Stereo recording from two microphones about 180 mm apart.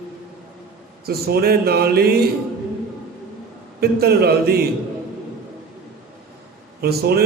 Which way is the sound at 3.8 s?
60° right (ahead or behind).